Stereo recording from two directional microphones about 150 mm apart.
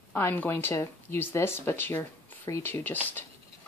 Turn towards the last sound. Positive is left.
turn(degrees=10)  # may be behind; listen again after turning